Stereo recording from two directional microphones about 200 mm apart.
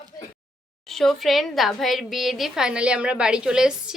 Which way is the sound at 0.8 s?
Centre (ahead or behind).